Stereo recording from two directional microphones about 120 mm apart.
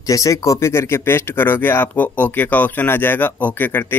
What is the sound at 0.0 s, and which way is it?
Speech, 30° left (ahead or behind).